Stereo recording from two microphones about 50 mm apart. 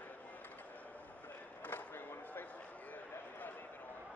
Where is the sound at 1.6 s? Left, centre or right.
Left.